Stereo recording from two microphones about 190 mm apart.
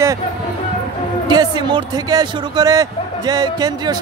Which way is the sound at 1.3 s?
20° right (ahead or behind).